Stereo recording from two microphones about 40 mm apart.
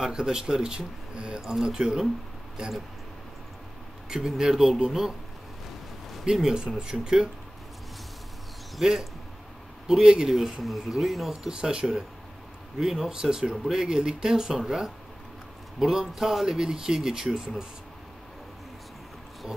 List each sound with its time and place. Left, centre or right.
0.0 s speech: centre
4.1 s speech: centre
6.4 s speech: centre
8.8 s speech: centre
9.8 s speech: centre
11.4 s speech: centre